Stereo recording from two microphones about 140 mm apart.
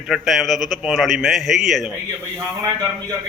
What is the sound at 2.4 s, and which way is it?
Speech, 25° right (ahead or behind).